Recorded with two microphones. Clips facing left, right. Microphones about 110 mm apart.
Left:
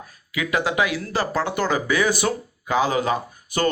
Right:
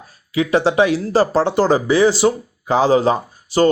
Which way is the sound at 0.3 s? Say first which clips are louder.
Right 7 dB; 30° right (ahead or behind).